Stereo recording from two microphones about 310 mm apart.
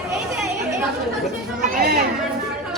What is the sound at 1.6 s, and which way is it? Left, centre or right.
Chatter, right.